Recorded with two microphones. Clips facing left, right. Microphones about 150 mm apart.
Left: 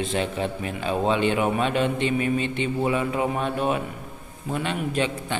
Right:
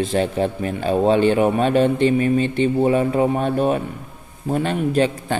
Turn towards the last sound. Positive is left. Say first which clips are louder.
# right 7 dB
turn(degrees=-40)  # may be behind; listen again after turning